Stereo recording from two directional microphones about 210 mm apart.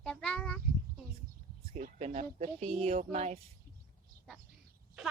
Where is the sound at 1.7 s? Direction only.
35° right (ahead or behind).